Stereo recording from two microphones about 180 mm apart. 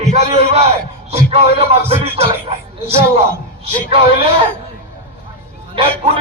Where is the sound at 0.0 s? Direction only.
40° right (ahead or behind).